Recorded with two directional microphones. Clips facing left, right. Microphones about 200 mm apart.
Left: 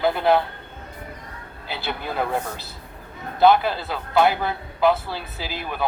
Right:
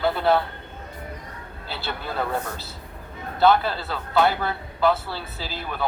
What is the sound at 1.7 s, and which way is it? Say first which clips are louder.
Speech: left 2 dB; 15° left (ahead or behind).